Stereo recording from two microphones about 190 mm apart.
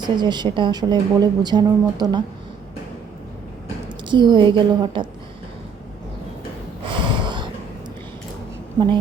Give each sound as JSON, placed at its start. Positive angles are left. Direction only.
{"t": 0.0, "sound": "a woman's voice", "side_deg": -25}
{"t": 4.1, "sound": "a woman's voice", "side_deg": -25}
{"t": 6.8, "sound": "snort", "side_deg": -25}